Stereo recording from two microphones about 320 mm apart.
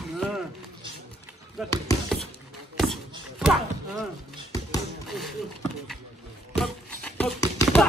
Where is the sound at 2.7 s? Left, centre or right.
Centre.